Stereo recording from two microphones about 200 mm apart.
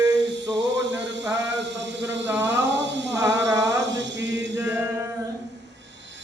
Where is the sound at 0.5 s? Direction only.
60° right (ahead or behind).